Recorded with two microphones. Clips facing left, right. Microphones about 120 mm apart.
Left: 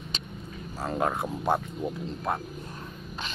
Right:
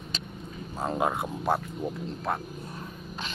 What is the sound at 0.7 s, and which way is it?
Speech, 20° right (ahead or behind).